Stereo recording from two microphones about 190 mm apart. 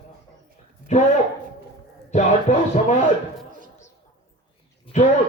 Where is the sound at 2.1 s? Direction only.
35° left (ahead or behind).